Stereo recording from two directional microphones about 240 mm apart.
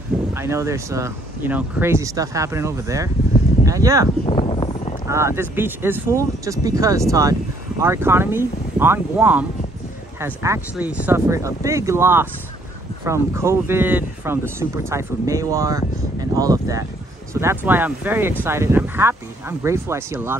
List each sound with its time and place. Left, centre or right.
0.3 s speech: centre
4.3 s a sound: left
5.0 s speech: centre